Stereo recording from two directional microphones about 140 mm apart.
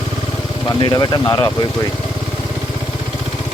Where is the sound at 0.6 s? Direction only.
30° left (ahead or behind).